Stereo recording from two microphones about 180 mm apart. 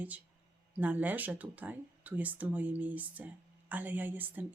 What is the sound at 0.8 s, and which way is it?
Speech, 10° right (ahead or behind).